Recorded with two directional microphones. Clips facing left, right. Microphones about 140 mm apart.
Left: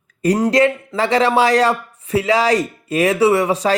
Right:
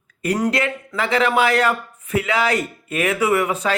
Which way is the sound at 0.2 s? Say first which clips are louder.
Left 6 dB; 35° left (ahead or behind).